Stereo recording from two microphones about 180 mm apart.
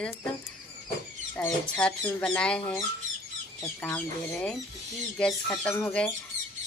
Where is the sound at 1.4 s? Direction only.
5° left (ahead or behind).